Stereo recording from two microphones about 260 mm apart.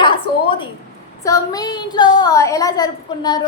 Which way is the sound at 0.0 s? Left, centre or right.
Centre.